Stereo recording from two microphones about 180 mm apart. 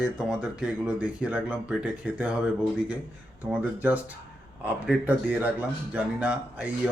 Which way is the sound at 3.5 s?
10° right (ahead or behind).